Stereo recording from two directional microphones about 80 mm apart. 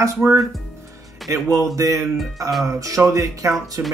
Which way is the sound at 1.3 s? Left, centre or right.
Right.